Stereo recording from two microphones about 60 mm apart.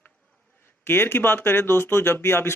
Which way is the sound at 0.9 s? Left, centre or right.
Left.